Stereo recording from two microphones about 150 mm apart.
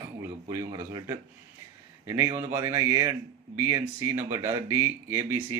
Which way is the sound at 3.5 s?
15° right (ahead or behind).